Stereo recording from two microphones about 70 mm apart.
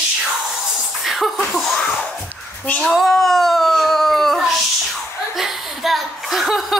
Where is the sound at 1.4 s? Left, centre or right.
Centre.